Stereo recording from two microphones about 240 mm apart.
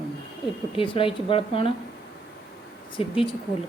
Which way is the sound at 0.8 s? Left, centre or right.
Left.